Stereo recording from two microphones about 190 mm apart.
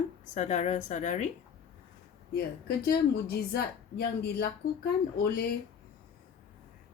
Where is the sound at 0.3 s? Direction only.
40° left (ahead or behind).